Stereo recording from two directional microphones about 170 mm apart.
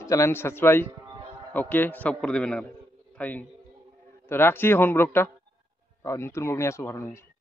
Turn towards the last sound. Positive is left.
turn(degrees=15)  # may be behind; listen again after turning